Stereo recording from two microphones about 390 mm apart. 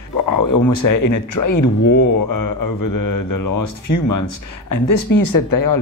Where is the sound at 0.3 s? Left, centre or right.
Left.